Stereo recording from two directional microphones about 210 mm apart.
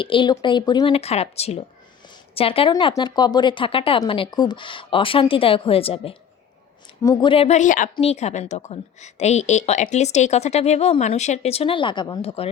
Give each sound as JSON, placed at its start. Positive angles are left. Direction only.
{"t": 0.0, "sound": "a woman's voice", "side_deg": 25}